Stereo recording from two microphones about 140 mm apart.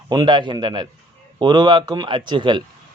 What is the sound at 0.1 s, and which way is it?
A man's voice, 30° right (ahead or behind).